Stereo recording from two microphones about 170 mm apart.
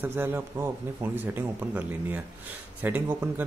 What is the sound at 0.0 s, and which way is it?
A man's voice, 15° right (ahead or behind).